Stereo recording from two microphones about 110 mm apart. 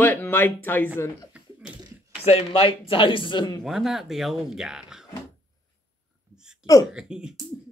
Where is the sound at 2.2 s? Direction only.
60° left (ahead or behind); by 3.6 s 40° left (ahead or behind).